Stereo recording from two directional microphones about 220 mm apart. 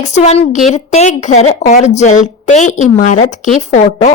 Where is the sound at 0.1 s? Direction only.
30° left (ahead or behind).